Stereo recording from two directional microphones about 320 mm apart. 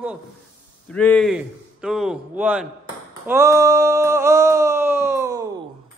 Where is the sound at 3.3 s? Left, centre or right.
Centre.